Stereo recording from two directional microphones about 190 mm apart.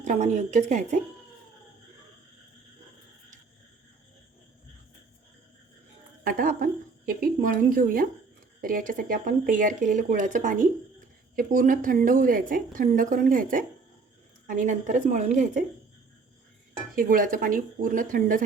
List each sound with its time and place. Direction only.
0.0 s a woman's voice: 40° right (ahead or behind)
6.2 s a woman's voice: 45° right (ahead or behind)
16.9 s a woman's voice: 50° right (ahead or behind)